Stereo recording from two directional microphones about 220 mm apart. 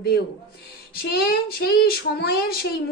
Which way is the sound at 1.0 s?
45° left (ahead or behind).